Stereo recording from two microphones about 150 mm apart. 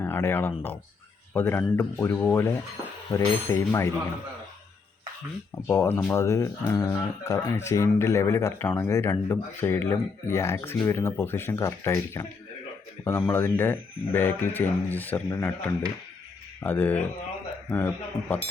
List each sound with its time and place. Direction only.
0.0 s speech: 15° left (ahead or behind)
5.6 s speech: 15° left (ahead or behind)
16.6 s speech: 10° left (ahead or behind)